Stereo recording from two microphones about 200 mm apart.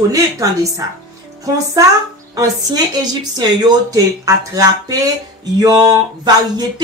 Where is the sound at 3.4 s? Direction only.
20° right (ahead or behind).